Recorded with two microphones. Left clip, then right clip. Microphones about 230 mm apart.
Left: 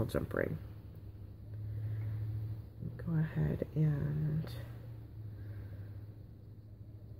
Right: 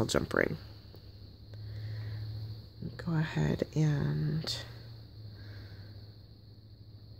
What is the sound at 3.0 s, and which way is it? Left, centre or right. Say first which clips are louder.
Speech: right 5 dB; right.